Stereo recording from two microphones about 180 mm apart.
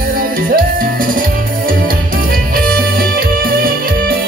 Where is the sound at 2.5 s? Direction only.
55° right (ahead or behind).